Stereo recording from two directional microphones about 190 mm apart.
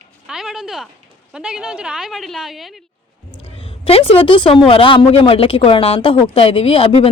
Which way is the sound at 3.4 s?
30° left (ahead or behind).